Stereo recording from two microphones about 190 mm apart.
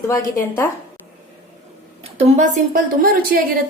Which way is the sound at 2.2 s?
35° right (ahead or behind).